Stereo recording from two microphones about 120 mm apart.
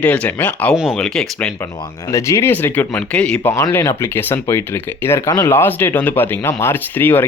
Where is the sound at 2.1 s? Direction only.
25° left (ahead or behind); by 3.5 s 10° left (ahead or behind).